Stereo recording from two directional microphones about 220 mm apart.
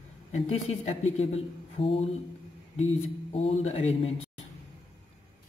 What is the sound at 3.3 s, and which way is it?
Speech, 30° left (ahead or behind).